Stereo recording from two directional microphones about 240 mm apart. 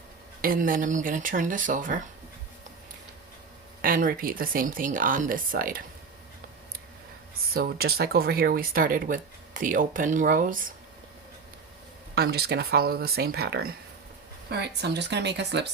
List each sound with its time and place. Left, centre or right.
0.4 s speech: right
3.8 s speech: right
7.5 s speech: right
12.1 s speech: right